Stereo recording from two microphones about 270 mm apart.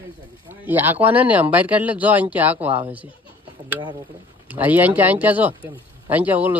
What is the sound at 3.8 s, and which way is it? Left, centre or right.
Speech, centre.